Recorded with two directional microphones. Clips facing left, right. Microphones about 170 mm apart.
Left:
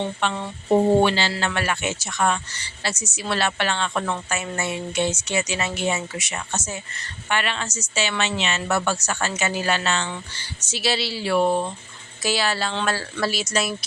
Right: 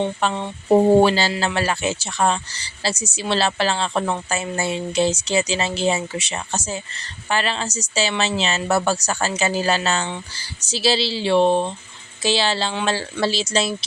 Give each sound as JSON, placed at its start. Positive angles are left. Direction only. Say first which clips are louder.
{"t": 0.2, "sound": "speech", "louder": "right 3 dB", "side_deg": -35}